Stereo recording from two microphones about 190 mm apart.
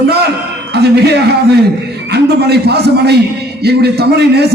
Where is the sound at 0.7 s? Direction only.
60° right (ahead or behind).